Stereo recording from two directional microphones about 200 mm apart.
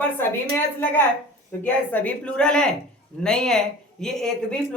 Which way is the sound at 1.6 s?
10° left (ahead or behind).